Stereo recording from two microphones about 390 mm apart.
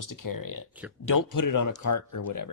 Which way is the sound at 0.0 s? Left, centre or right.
Left.